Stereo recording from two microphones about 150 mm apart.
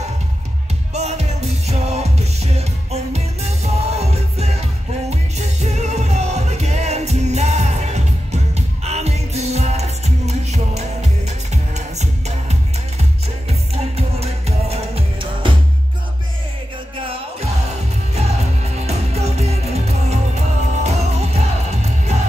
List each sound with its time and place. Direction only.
0.9 s music: 45° right (ahead or behind)
16.9 s music: 35° right (ahead or behind)